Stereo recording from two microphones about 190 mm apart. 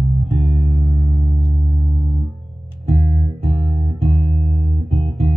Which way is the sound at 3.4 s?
35° right (ahead or behind).